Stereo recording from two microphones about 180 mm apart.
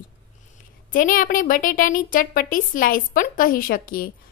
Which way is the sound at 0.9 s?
50° left (ahead or behind).